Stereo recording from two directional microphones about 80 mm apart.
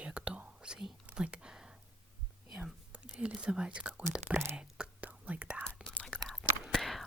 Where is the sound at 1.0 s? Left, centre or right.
Centre.